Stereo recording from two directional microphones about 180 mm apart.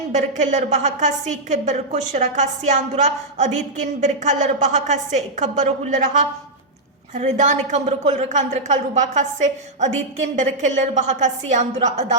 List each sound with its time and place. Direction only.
0.1 s a woman's voice: 40° right (ahead or behind)